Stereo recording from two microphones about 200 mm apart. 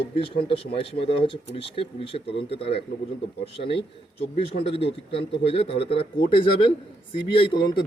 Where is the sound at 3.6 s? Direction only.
45° left (ahead or behind).